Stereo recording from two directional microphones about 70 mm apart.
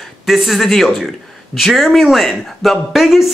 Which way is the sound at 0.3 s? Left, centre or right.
Centre.